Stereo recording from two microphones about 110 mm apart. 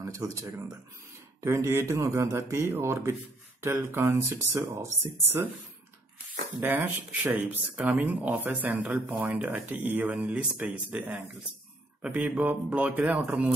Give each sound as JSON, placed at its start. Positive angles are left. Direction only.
{"t": 0.0, "sound": "speech", "side_deg": -30}
{"t": 6.6, "sound": "speech", "side_deg": -15}